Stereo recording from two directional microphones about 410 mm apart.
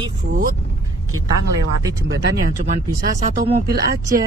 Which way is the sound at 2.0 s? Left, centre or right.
Right.